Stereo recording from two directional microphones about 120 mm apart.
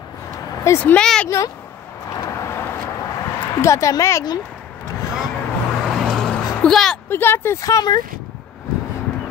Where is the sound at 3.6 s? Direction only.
25° left (ahead or behind).